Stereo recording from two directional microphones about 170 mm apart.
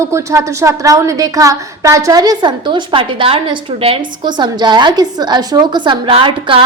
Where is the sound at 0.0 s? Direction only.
15° right (ahead or behind).